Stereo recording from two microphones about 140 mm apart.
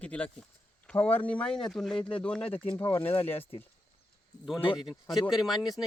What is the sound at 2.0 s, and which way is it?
Speech, 35° left (ahead or behind).